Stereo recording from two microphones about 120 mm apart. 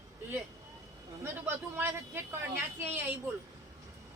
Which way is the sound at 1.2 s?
20° right (ahead or behind).